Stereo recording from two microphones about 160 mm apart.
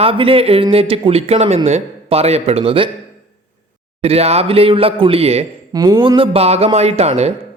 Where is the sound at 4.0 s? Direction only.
40° right (ahead or behind).